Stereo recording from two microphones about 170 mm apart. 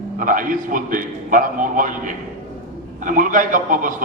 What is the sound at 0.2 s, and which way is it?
A man's voice, 55° right (ahead or behind).